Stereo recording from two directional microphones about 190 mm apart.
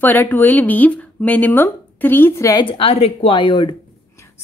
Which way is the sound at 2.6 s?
30° left (ahead or behind).